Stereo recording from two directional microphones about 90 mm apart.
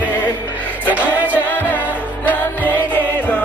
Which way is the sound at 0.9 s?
15° right (ahead or behind).